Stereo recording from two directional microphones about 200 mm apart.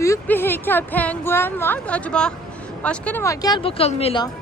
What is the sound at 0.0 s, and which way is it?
Speech, 15° left (ahead or behind).